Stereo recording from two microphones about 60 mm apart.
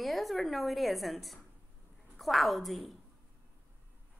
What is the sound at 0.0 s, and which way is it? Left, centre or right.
Speech, centre.